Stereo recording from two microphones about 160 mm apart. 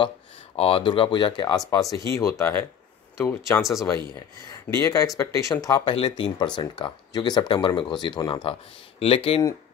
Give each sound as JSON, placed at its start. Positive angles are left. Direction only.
{"t": 0.6, "sound": "speech", "side_deg": 35}
{"t": 4.6, "sound": "speech", "side_deg": 15}